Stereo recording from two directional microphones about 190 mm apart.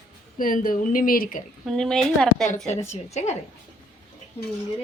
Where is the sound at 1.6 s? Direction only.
Centre (ahead or behind).